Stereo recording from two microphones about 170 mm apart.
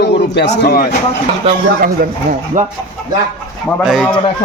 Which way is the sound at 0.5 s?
60° left (ahead or behind).